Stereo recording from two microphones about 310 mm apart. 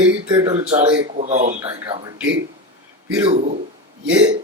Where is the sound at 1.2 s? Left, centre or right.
Right.